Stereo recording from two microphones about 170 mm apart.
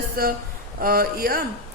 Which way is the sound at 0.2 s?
60° right (ahead or behind).